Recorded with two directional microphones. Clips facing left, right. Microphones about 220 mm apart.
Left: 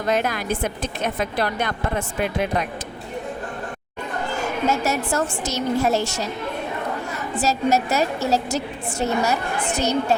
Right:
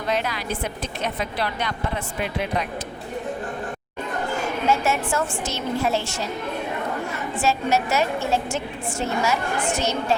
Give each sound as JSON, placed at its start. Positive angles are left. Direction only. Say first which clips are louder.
{"t": 0.1, "sound": "a woman's voice", "louder": "left 3 dB", "side_deg": 50}
{"t": 4.7, "sound": "a woman's voice", "louder": "right 3 dB", "side_deg": 40}
{"t": 7.3, "sound": "a woman's voice", "louder": "left 2 dB", "side_deg": 40}